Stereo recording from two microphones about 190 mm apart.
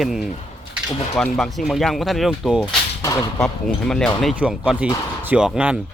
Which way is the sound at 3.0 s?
20° left (ahead or behind).